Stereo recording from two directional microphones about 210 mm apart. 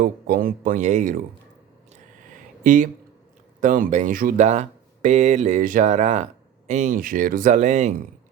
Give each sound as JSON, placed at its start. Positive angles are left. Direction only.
{"t": 0.0, "sound": "speech", "side_deg": -45}
{"t": 2.6, "sound": "speech", "side_deg": -40}